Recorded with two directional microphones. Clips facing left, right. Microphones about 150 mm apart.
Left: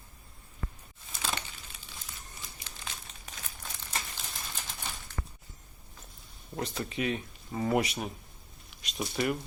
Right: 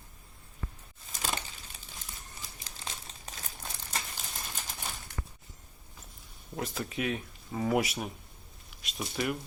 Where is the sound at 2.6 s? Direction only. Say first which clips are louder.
Right 2 dB; 30° right (ahead or behind).